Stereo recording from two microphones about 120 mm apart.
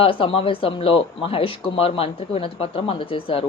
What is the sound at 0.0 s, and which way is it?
Speech, 45° left (ahead or behind).